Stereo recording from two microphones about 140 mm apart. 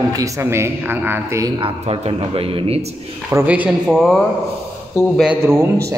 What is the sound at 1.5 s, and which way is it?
A man's voice, 40° right (ahead or behind).